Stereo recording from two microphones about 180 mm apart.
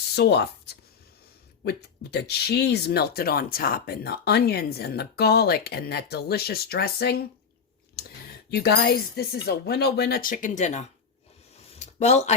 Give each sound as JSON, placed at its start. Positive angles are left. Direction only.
{"t": 0.2, "sound": "speech", "side_deg": 65}
{"t": 8.4, "sound": "speech", "side_deg": 65}
{"t": 11.7, "sound": "a sound", "side_deg": 40}